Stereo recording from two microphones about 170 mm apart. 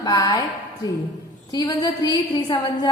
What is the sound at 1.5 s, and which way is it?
A woman's voice, 25° left (ahead or behind).